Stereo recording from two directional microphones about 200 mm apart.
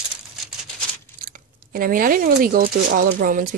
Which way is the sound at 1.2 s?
45° right (ahead or behind).